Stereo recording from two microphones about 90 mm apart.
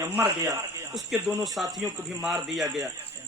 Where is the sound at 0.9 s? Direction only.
Centre (ahead or behind).